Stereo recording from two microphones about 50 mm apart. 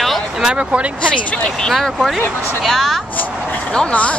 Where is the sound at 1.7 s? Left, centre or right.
Centre.